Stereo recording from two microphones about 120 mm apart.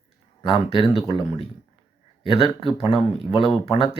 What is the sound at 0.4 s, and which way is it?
Speech, 50° left (ahead or behind).